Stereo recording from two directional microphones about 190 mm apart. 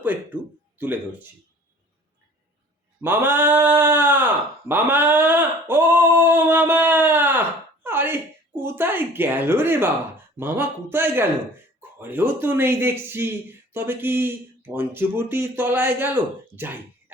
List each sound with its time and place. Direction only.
0.0 s speech: 10° right (ahead or behind)
3.0 s speech: 10° right (ahead or behind)
4.7 s a sound: 10° right (ahead or behind)
7.9 s speech: 10° right (ahead or behind)